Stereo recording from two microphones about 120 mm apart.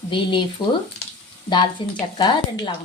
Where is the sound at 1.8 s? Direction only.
45° left (ahead or behind).